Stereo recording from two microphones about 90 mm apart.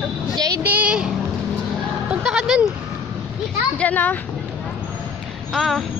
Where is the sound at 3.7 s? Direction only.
20° left (ahead or behind).